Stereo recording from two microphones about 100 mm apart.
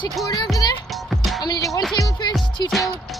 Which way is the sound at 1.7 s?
Centre (ahead or behind).